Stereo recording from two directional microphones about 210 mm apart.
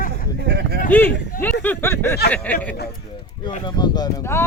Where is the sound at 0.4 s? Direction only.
50° right (ahead or behind).